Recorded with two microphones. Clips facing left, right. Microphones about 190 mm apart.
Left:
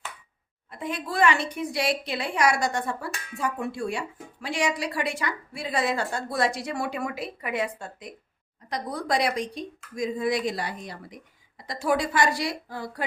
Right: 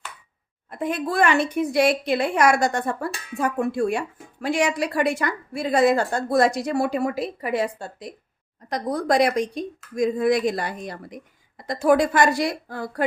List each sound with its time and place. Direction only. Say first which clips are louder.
0.7 s a woman's voice: right 6 dB; 50° right (ahead or behind)
8.7 s a woman's voice: right 6 dB; 45° right (ahead or behind)